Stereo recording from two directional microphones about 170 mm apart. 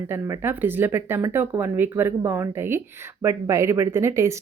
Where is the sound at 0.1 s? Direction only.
15° right (ahead or behind).